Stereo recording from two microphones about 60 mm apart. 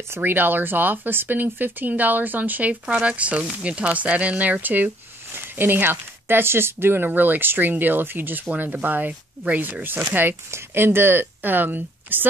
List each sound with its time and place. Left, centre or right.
0.1 s speech: right